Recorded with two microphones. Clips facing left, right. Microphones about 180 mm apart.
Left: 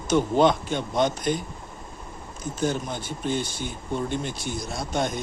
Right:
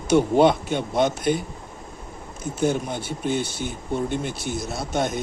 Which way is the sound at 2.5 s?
10° right (ahead or behind).